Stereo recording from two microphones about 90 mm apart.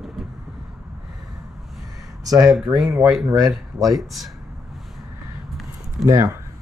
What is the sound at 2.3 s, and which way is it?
Speech, 40° right (ahead or behind).